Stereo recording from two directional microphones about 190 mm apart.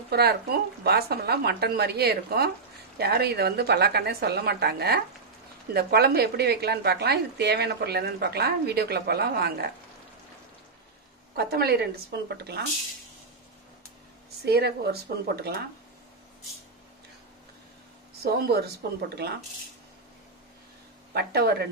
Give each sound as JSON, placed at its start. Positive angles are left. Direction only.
{"t": 0.1, "sound": "a woman's voice", "side_deg": -55}
{"t": 11.3, "sound": "a woman's voice", "side_deg": -60}
{"t": 14.4, "sound": "a woman's voice", "side_deg": -55}
{"t": 18.2, "sound": "a woman's voice", "side_deg": -55}
{"t": 21.1, "sound": "a woman's voice", "side_deg": -55}